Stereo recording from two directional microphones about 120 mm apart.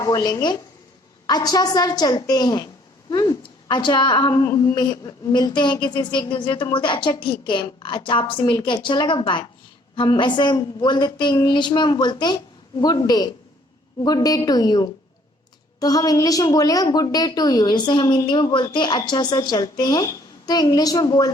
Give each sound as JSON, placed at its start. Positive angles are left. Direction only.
{"t": 0.0, "sound": "a woman's voice", "side_deg": 30}
{"t": 3.7, "sound": "a woman's voice", "side_deg": 40}